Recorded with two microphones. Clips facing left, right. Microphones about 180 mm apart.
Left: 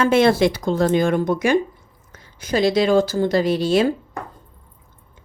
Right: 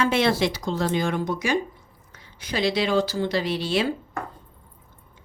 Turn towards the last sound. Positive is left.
turn(degrees=45)  # may be behind; listen again after turning